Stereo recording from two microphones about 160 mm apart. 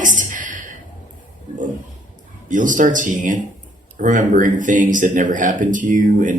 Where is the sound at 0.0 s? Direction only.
55° right (ahead or behind).